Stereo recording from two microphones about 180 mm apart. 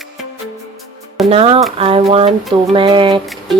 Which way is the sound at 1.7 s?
30° right (ahead or behind).